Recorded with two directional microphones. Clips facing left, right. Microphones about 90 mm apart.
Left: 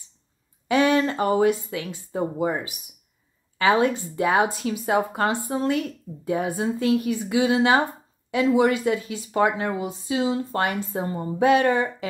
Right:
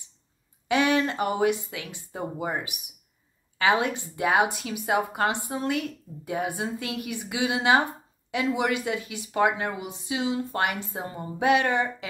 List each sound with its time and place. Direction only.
0.7 s a woman's voice: 35° left (ahead or behind)
3.5 s a woman's voice: 35° left (ahead or behind)